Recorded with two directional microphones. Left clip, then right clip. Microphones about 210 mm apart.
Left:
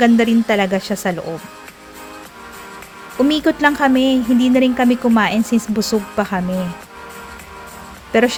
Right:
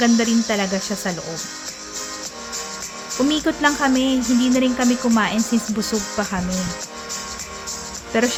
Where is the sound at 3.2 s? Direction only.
25° left (ahead or behind).